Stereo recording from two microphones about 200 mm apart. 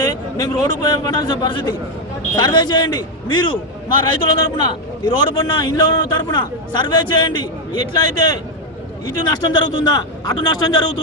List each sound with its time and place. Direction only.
0.0 s a man's voice: 20° left (ahead or behind)
9.0 s a man's voice: 20° left (ahead or behind)